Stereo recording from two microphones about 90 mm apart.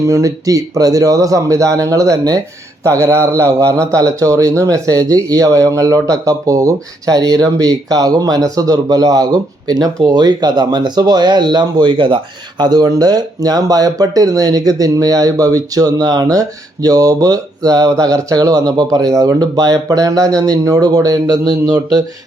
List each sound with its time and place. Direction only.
0.0 s a man's voice: 40° right (ahead or behind)